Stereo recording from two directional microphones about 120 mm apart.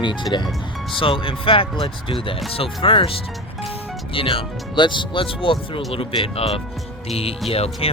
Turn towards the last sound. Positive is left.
turn(degrees=55)  # may be behind; listen again after turning